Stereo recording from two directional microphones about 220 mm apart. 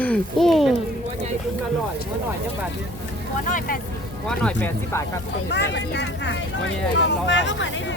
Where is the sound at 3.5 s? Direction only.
35° left (ahead or behind).